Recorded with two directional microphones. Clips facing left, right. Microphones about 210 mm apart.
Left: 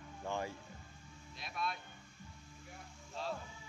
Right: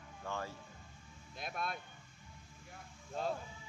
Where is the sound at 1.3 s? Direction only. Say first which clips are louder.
Right 1 dB; 50° right (ahead or behind).